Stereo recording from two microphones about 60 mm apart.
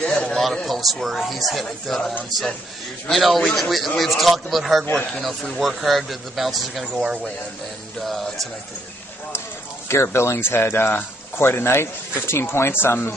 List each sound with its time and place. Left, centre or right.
0.0 s a sound: centre
0.7 s speech: centre
10.1 s speech: left